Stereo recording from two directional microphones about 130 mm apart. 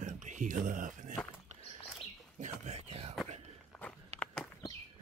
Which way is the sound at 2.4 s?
65° right (ahead or behind).